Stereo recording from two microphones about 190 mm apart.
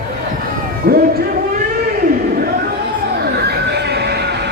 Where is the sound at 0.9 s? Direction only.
55° right (ahead or behind).